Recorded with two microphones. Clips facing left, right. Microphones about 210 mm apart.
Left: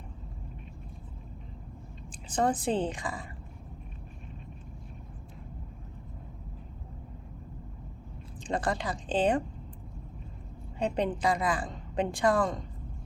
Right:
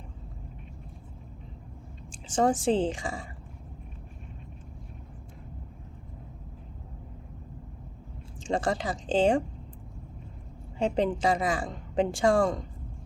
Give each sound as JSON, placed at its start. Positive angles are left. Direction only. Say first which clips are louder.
{"t": 2.2, "sound": "a woman's voice", "louder": "right 4 dB", "side_deg": -25}
{"t": 8.4, "sound": "a woman's voice", "louder": "right 3 dB", "side_deg": -25}
{"t": 10.8, "sound": "a woman's voice", "louder": "right 3 dB", "side_deg": -25}